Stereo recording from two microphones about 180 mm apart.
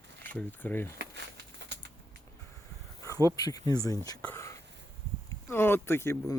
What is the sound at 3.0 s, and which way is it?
Insect, 15° left (ahead or behind).